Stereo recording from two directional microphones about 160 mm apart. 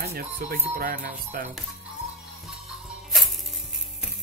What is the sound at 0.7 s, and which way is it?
Speech, 65° right (ahead or behind).